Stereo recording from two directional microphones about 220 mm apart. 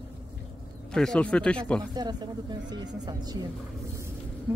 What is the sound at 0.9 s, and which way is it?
Speech, centre (ahead or behind).